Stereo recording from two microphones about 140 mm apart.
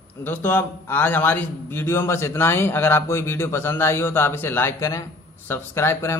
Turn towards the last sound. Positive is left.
turn(degrees=15)  # may be behind; listen again after turning